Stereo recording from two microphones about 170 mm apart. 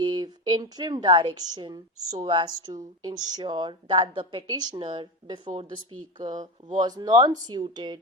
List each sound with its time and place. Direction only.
0.0 s a woman's voice: 25° right (ahead or behind)